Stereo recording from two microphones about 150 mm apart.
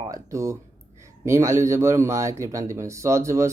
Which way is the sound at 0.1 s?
20° right (ahead or behind).